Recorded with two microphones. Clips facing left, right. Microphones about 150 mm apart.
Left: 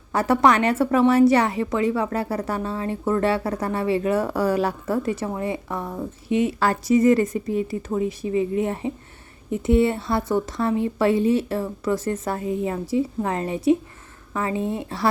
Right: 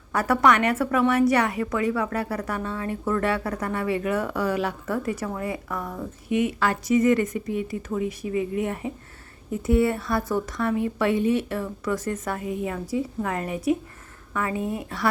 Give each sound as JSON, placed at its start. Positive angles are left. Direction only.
{"t": 0.1, "sound": "a woman's voice", "side_deg": 25}